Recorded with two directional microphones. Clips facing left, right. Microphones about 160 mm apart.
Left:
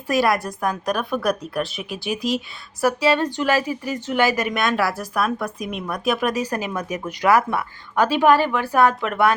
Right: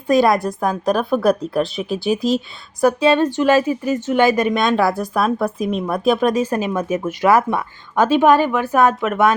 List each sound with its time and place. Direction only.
0.1 s a woman's voice: 25° right (ahead or behind)
2.8 s a woman's voice: 20° right (ahead or behind)